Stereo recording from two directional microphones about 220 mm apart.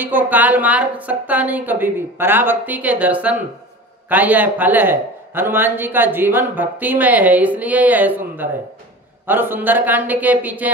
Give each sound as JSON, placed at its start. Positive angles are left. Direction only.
{"t": 0.0, "sound": "a man's voice", "side_deg": -10}